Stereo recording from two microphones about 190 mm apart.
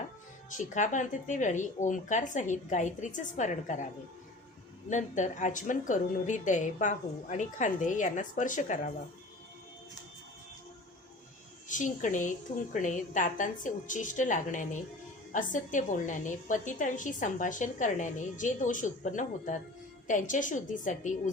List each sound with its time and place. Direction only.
0.5 s a woman's voice: 40° left (ahead or behind)
4.9 s a woman's voice: 40° left (ahead or behind)
11.7 s a woman's voice: 40° left (ahead or behind)